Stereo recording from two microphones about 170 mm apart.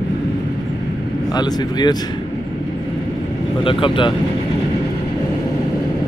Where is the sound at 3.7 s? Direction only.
30° left (ahead or behind).